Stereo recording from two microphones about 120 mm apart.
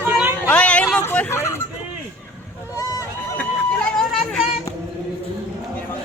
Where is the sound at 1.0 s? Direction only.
15° left (ahead or behind).